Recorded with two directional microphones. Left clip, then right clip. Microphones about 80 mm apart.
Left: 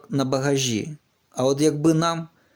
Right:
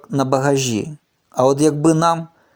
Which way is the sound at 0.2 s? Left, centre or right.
Right.